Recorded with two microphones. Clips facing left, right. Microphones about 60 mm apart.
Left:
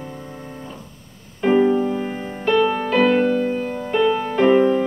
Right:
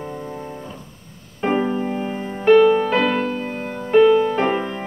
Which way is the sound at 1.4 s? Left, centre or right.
Centre.